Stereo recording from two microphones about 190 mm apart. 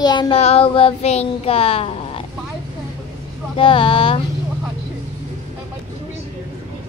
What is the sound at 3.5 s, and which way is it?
Speech, 30° left (ahead or behind).